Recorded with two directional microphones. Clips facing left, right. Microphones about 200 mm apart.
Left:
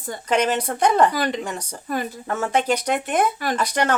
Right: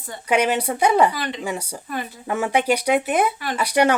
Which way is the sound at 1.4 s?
10° right (ahead or behind).